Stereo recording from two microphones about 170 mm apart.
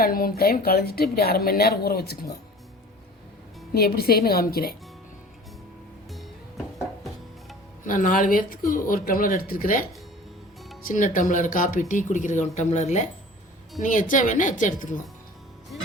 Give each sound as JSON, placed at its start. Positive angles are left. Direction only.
{"t": 0.0, "sound": "a woman's voice", "side_deg": 60}
{"t": 3.8, "sound": "a woman's voice", "side_deg": 65}
{"t": 7.9, "sound": "a woman's voice", "side_deg": 50}
{"t": 10.8, "sound": "speech", "side_deg": 50}